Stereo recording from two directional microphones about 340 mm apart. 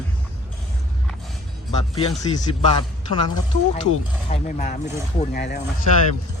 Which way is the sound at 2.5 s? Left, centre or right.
Centre.